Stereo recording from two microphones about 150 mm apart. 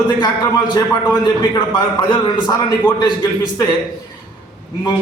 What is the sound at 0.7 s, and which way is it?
A man's voice, 30° left (ahead or behind).